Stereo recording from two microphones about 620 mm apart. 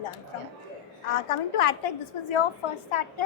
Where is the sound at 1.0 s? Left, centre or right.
Left.